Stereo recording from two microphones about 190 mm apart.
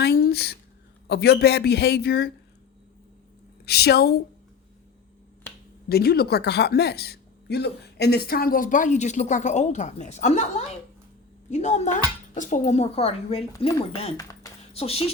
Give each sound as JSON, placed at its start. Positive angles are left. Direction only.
{"t": 0.0, "sound": "a sound", "side_deg": 55}
{"t": 1.0, "sound": "a man's voice", "side_deg": 60}
{"t": 3.7, "sound": "a man's voice", "side_deg": 55}
{"t": 5.9, "sound": "speech", "side_deg": 55}